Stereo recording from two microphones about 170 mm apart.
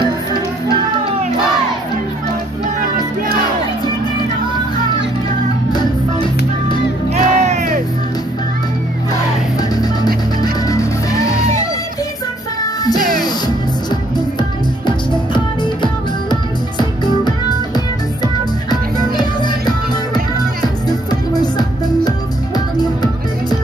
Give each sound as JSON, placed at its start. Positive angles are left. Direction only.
{"t": 5.7, "sound": "music", "side_deg": 25}
{"t": 7.2, "sound": "music", "side_deg": -45}
{"t": 9.6, "sound": "music", "side_deg": 25}
{"t": 14.9, "sound": "music", "side_deg": 25}